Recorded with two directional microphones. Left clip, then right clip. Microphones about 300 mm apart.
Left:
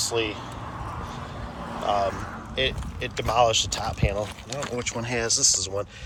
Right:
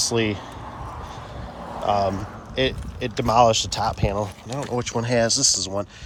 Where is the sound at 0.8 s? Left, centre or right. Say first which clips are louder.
Even; right.